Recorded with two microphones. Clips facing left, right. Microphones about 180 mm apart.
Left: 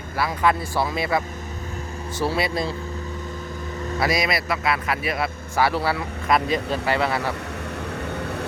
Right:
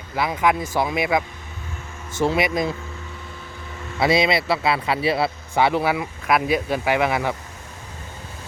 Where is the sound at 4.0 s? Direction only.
25° right (ahead or behind).